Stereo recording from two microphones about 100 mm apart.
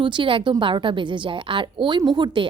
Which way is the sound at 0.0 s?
55° right (ahead or behind).